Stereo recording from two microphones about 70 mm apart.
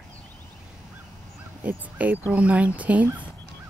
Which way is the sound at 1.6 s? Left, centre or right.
Right.